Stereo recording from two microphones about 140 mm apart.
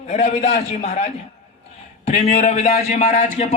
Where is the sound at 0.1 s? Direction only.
55° left (ahead or behind).